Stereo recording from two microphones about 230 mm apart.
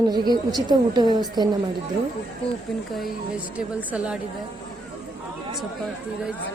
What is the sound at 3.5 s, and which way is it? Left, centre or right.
Speech, centre.